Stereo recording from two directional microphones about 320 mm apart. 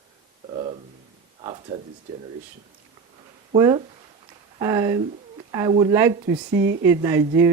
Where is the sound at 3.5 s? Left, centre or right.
Centre.